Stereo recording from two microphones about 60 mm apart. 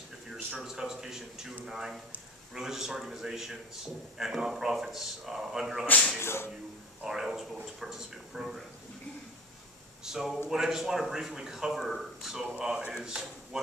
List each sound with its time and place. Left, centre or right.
0.6 s speech: centre
6.1 s speech: left
7.1 s speech: centre
10.0 s speech: centre